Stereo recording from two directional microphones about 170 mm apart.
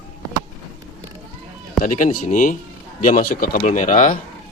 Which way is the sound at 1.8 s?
50° left (ahead or behind).